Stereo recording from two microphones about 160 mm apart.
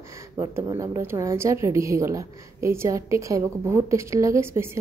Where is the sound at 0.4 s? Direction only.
20° right (ahead or behind).